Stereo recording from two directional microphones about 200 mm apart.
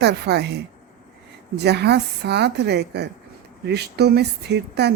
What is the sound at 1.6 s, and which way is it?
Speech, 55° right (ahead or behind).